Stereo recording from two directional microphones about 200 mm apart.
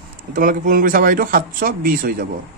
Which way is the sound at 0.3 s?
45° right (ahead or behind).